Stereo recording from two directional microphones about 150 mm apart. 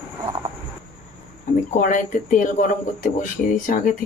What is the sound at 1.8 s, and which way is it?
Speech, 60° left (ahead or behind).